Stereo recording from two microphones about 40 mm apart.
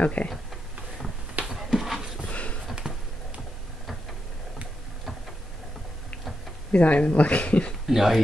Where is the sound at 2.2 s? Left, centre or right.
Left.